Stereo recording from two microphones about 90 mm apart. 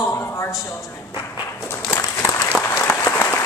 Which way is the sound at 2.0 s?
40° left (ahead or behind).